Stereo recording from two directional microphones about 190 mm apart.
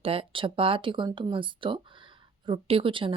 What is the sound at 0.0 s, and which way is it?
Speech, 30° right (ahead or behind).